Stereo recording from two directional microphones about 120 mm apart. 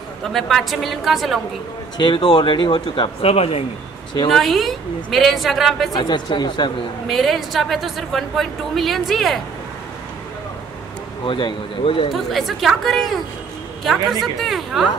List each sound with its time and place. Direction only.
0.3 s a woman's voice: centre (ahead or behind)
2.0 s speech: 45° left (ahead or behind)
3.2 s speech: 55° left (ahead or behind)
4.3 s a woman's voice: centre (ahead or behind)
5.9 s speech: 40° left (ahead or behind)
7.1 s a woman's voice: centre (ahead or behind)
11.2 s speech: 45° left (ahead or behind)
12.1 s a woman's voice: centre (ahead or behind)